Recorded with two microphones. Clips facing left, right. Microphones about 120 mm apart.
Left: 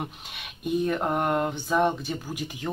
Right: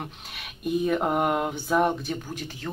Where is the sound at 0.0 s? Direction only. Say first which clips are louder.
Left 2 dB; centre (ahead or behind).